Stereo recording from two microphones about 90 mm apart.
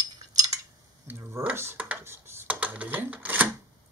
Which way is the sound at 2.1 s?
30° right (ahead or behind).